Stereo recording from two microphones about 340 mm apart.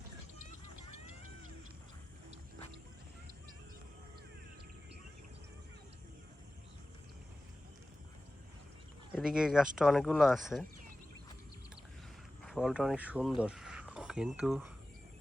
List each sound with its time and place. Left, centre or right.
0.3 s a sound: right
9.1 s speech: centre
12.5 s speech: centre